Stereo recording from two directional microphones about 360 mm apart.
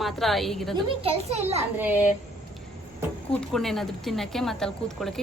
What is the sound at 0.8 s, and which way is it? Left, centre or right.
Speech, centre.